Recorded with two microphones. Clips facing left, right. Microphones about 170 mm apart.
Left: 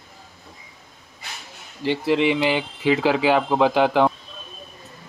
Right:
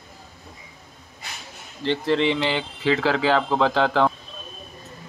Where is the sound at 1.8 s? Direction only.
10° left (ahead or behind).